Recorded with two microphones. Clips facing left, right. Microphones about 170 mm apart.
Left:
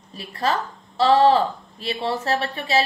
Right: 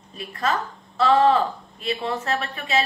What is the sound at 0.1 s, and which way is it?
A woman's voice, 35° left (ahead or behind).